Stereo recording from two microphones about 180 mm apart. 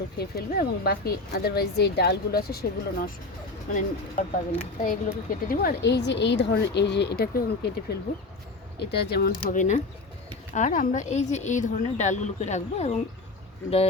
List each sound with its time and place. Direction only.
0.2 s a woman's voice: 60° left (ahead or behind)
3.8 s a woman's voice: 45° left (ahead or behind); by 7.7 s 60° left (ahead or behind)
8.8 s a woman's voice: 65° left (ahead or behind)
9.6 s a woman's voice: 45° left (ahead or behind)